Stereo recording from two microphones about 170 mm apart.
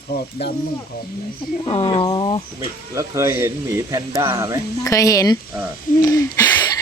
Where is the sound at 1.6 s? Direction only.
35° left (ahead or behind).